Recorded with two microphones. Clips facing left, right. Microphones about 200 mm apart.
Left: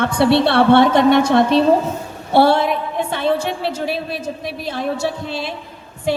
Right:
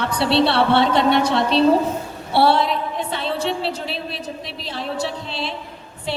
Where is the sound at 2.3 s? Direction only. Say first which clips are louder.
Left 3 dB; 50° left (ahead or behind).